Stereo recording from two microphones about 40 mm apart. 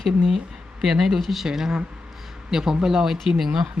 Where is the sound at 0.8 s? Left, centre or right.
Centre.